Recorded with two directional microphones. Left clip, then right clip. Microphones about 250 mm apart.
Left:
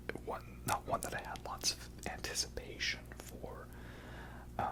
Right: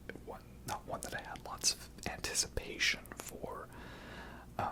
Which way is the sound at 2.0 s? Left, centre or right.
Centre.